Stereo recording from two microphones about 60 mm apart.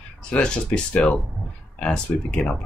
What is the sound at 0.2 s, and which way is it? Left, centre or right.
Speech, centre.